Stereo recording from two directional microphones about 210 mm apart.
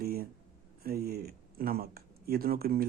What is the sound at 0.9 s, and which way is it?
Speech, 45° right (ahead or behind).